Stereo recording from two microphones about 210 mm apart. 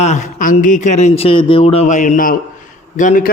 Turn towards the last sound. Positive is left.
turn(degrees=40)  # may be behind; listen again after turning